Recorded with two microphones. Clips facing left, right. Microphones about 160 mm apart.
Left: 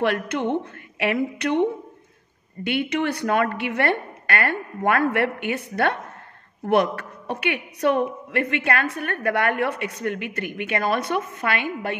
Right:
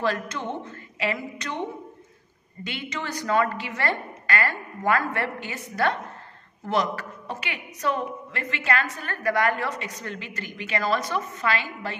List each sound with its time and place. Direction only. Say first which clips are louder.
0.0 s a woman's voice: left 5 dB; 60° left (ahead or behind)
2.6 s a woman's voice: left 10 dB; 60° left (ahead or behind)